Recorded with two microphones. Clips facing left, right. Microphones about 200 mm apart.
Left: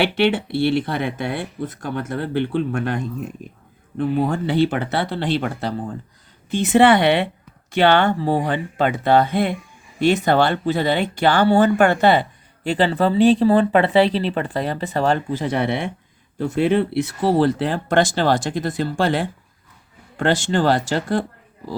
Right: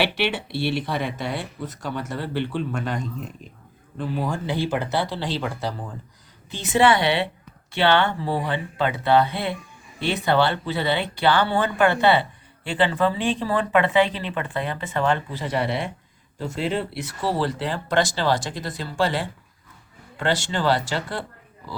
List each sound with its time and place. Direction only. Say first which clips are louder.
0.0 s speech: left 6 dB; 55° left (ahead or behind)